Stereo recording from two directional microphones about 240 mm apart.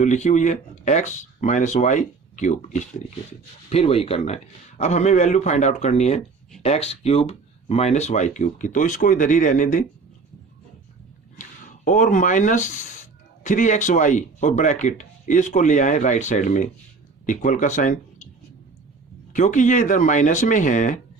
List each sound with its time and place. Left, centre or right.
0.0 s speech: left
11.9 s speech: left
19.3 s speech: left